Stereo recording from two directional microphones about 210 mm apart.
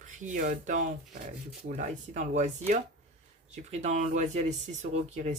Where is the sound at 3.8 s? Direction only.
35° right (ahead or behind).